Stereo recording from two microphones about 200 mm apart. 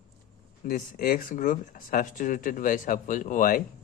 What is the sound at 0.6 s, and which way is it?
Speech, 45° left (ahead or behind).